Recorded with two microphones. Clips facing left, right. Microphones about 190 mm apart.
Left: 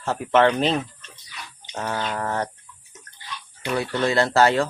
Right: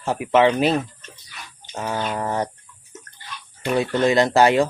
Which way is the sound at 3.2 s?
50° right (ahead or behind).